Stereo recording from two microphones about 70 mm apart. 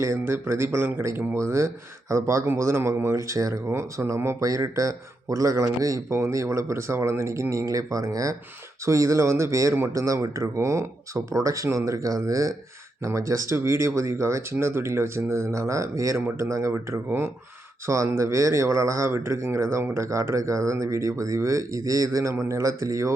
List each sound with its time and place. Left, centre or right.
0.0 s speech: right
3.7 s speech: right
17.1 s speech: right
17.8 s speech: right